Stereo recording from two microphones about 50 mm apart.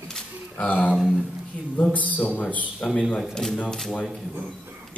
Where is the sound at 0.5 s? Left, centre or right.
Left.